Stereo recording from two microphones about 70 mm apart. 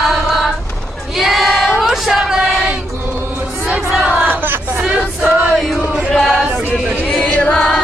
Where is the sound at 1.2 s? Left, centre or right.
Centre.